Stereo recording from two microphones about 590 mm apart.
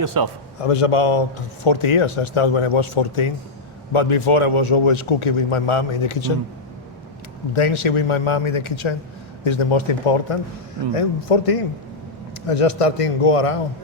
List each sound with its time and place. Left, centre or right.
0.0 s a man's voice: right
0.6 s speech: left
7.5 s a man's voice: left